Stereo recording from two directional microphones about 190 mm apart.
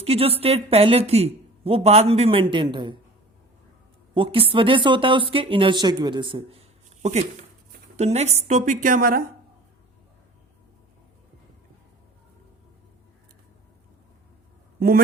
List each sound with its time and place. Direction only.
0.0 s a woman's voice: 30° right (ahead or behind)
4.1 s a woman's voice: 25° right (ahead or behind); by 9.2 s 50° right (ahead or behind)
14.8 s a man's voice: 50° right (ahead or behind)